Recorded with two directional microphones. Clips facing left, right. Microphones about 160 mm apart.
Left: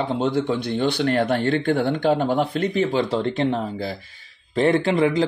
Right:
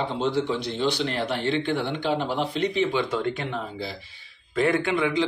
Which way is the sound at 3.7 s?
45° left (ahead or behind).